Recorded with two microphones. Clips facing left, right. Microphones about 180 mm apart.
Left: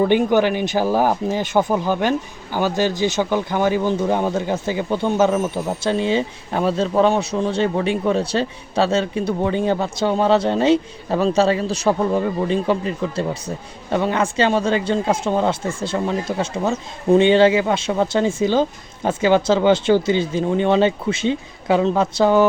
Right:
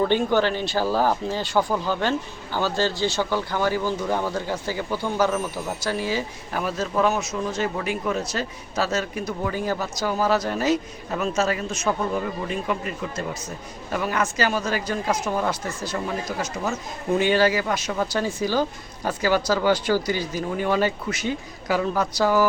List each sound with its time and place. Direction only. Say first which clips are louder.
0.0 s speech: left 5 dB; 15° left (ahead or behind)